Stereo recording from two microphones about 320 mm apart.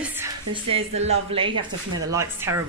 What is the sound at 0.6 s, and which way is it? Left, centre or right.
Speech, centre.